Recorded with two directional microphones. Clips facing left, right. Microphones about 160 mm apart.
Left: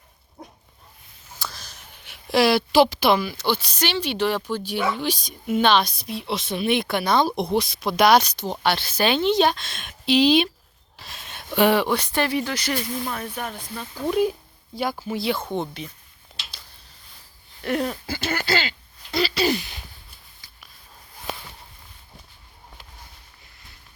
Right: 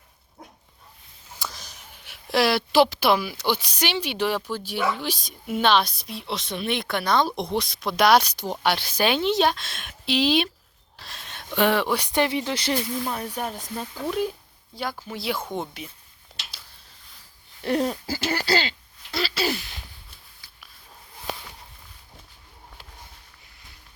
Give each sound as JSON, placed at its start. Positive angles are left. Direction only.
{"t": 1.4, "sound": "a sound", "side_deg": -15}
{"t": 2.0, "sound": "a woman's voice", "side_deg": 0}
{"t": 10.9, "sound": "a sound", "side_deg": 5}
{"t": 11.9, "sound": "speech", "side_deg": -15}
{"t": 13.1, "sound": "speech", "side_deg": -15}
{"t": 13.5, "sound": "speech", "side_deg": -35}
{"t": 14.1, "sound": "a woman's voice", "side_deg": 10}
{"t": 17.6, "sound": "speech", "side_deg": -25}
{"t": 19.1, "sound": "a sound", "side_deg": 0}
{"t": 20.4, "sound": "sniff", "side_deg": -5}